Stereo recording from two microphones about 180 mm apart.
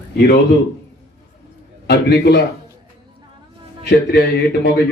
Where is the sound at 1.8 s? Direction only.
65° left (ahead or behind).